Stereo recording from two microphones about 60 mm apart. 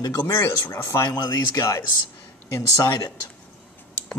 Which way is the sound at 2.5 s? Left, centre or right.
Left.